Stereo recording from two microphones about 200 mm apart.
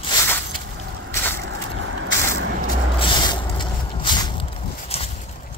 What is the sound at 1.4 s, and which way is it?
Crushing, 65° right (ahead or behind).